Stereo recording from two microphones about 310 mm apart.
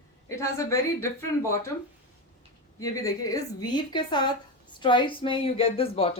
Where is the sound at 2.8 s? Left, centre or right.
Centre.